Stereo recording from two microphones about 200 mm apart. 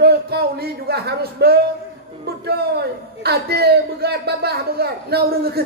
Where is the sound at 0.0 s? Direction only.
55° right (ahead or behind).